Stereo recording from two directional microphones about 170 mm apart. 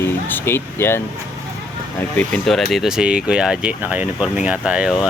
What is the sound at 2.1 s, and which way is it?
Speech, 5° left (ahead or behind).